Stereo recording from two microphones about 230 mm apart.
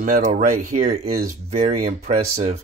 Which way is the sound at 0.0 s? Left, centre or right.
Right.